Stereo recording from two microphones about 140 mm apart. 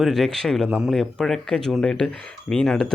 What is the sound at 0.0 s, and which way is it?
Speech, centre (ahead or behind).